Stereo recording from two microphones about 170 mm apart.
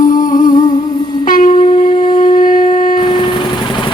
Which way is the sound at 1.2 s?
50° left (ahead or behind).